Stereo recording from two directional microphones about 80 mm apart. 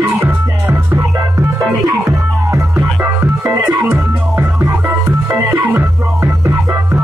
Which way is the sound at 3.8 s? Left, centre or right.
Right.